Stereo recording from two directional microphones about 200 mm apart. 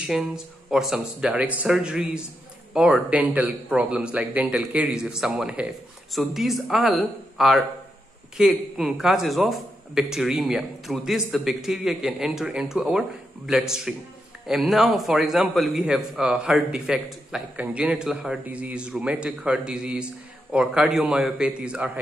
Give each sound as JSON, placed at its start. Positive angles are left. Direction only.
{"t": 0.0, "sound": "a man's voice", "side_deg": -5}